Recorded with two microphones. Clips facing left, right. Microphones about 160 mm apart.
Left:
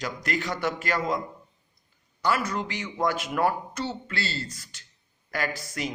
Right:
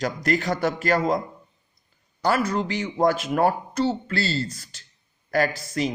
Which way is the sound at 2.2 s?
35° right (ahead or behind).